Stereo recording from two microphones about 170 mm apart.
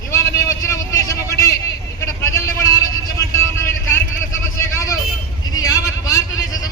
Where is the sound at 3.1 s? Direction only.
15° left (ahead or behind).